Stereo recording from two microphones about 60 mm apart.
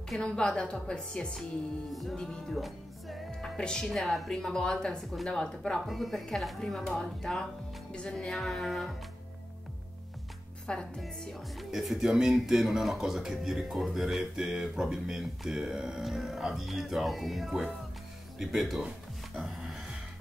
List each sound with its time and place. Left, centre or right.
0.2 s speech: centre
1.9 s speech: centre
2.1 s music: centre
3.3 s a woman's voice: centre
4.3 s speech: centre
5.9 s speech: centre
10.7 s speech: centre
11.7 s speech: centre